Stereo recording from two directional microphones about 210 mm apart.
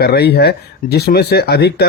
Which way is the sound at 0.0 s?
50° left (ahead or behind).